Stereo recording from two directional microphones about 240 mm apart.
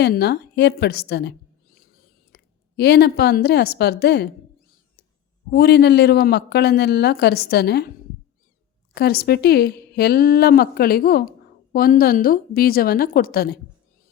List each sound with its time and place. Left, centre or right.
0.0 s a woman's voice: left
5.5 s speech: left
9.0 s speech: left